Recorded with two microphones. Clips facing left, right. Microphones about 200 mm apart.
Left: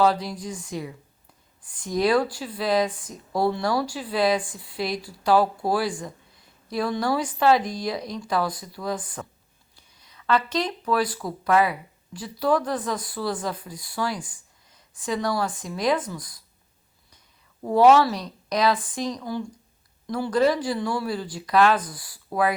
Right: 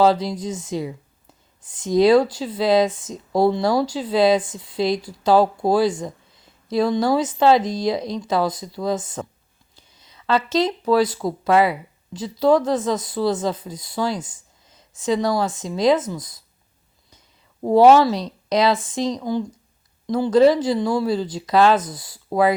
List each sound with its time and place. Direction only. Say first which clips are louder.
0.0 s speech: right 5 dB; 25° right (ahead or behind)
17.6 s speech: right 4 dB; 30° right (ahead or behind)